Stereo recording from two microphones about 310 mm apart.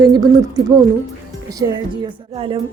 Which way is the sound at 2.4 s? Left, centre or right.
Centre.